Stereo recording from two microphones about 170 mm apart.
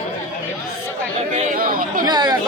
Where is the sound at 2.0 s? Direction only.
25° right (ahead or behind).